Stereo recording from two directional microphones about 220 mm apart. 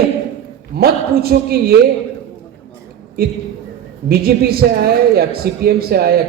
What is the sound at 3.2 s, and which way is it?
Speech, 45° right (ahead or behind).